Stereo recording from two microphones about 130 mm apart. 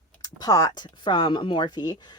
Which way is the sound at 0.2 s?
30° left (ahead or behind).